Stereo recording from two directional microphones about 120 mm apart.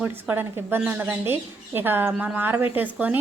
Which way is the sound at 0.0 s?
15° right (ahead or behind).